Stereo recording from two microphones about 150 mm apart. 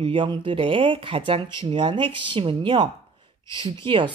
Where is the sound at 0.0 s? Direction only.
35° right (ahead or behind).